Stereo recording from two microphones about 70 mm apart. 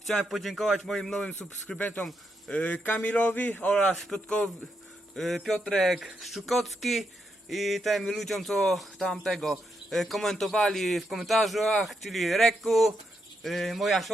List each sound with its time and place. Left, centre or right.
0.1 s speech: centre; by 3.7 s left
3.9 s speech: centre